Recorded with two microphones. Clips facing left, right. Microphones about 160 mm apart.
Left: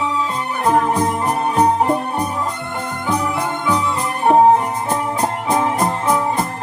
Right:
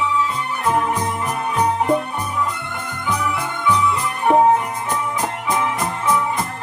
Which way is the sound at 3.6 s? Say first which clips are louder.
Right 3 dB; 35° left (ahead or behind).